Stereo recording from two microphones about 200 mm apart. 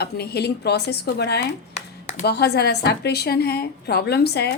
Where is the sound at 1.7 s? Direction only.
35° left (ahead or behind).